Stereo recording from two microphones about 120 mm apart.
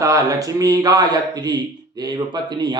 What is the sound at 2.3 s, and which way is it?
Speech, 40° right (ahead or behind).